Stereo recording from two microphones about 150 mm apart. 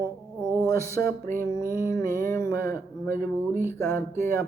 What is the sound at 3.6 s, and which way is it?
Speech, 15° left (ahead or behind).